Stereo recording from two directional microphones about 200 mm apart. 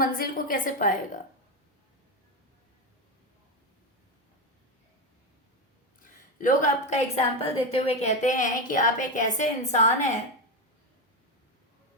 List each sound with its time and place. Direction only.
0.0 s a woman's voice: 45° left (ahead or behind)
6.0 s a woman's voice: 40° left (ahead or behind)